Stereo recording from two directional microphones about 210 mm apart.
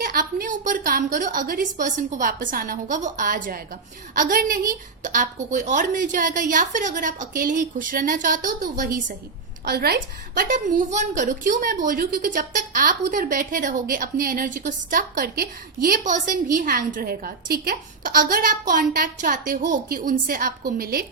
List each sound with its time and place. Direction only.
0.0 s a woman's voice: 45° right (ahead or behind)